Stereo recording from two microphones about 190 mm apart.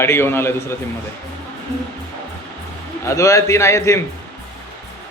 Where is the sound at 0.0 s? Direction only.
15° left (ahead or behind).